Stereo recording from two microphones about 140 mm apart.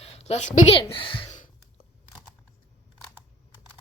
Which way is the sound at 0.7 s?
40° left (ahead or behind).